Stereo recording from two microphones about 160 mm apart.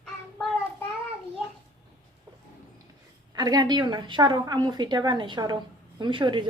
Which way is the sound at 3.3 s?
25° right (ahead or behind).